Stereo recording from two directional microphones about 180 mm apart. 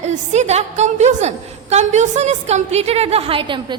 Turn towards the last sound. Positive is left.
turn(degrees=-30)  # may be behind; listen again after turning